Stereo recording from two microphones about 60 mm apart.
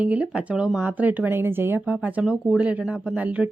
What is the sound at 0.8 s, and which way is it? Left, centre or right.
A woman's voice, right.